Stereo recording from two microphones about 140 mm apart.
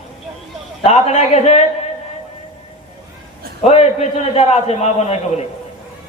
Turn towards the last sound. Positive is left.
turn(degrees=50)  # may be behind; listen again after turning